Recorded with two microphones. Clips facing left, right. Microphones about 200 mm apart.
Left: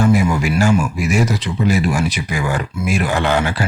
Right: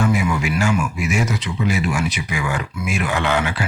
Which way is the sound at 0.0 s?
35° left (ahead or behind).